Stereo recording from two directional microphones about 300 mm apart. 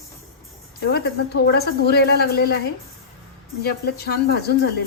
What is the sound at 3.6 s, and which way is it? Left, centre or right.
Speech, left.